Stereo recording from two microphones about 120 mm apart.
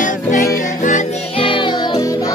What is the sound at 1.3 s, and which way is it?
Music, 45° left (ahead or behind).